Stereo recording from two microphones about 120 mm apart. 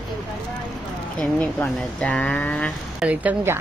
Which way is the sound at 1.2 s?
10° left (ahead or behind).